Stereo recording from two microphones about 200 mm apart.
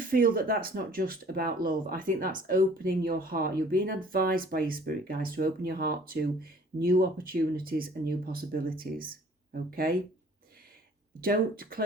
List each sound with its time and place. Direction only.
0.0 s speech: 45° right (ahead or behind)
11.2 s speech: 45° right (ahead or behind)